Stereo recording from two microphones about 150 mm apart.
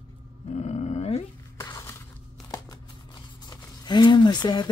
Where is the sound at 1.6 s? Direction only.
20° left (ahead or behind).